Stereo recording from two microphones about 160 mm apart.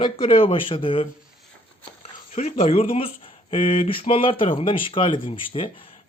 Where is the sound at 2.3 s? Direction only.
45° left (ahead or behind).